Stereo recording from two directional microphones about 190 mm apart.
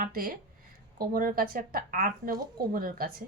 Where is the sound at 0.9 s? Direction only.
50° right (ahead or behind).